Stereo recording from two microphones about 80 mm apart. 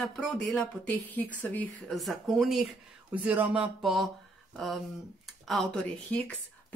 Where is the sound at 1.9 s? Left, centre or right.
Centre.